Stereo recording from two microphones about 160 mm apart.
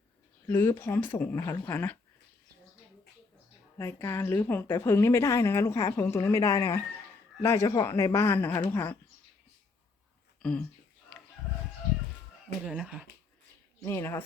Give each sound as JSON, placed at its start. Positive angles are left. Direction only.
{"t": 0.4, "sound": "a woman's voice", "side_deg": 15}
{"t": 3.8, "sound": "a woman's voice", "side_deg": 15}
{"t": 10.4, "sound": "speech", "side_deg": 5}
{"t": 11.1, "sound": "chicken", "side_deg": 5}
{"t": 12.6, "sound": "speech", "side_deg": -5}
{"t": 13.8, "sound": "a woman's voice", "side_deg": 15}